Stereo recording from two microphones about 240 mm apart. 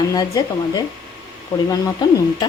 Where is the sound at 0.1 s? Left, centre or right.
Centre.